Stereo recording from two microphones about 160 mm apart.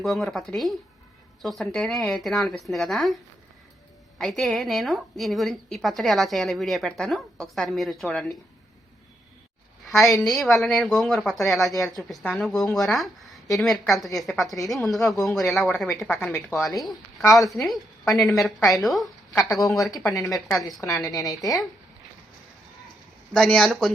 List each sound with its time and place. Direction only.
0.0 s a woman's voice: centre (ahead or behind)
4.2 s a woman's voice: centre (ahead or behind)
9.8 s a woman's voice: centre (ahead or behind)
16.0 s speech: 15° left (ahead or behind)
16.6 s a woman's voice: centre (ahead or behind)
20.8 s a woman's voice: 20° left (ahead or behind)
23.3 s a woman's voice: 5° left (ahead or behind)